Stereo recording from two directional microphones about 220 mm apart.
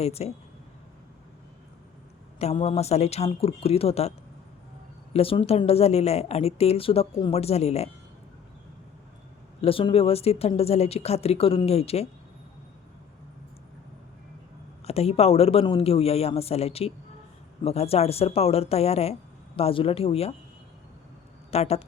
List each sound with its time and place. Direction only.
0.0 s a woman's voice: 30° left (ahead or behind)
2.4 s a woman's voice: 30° left (ahead or behind)
5.1 s a woman's voice: 25° left (ahead or behind)
9.6 s a woman's voice: 25° left (ahead or behind)
14.8 s a woman's voice: 25° left (ahead or behind)
21.5 s a woman's voice: 30° left (ahead or behind)